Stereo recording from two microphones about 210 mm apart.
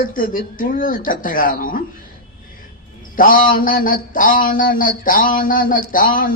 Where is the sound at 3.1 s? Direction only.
40° left (ahead or behind).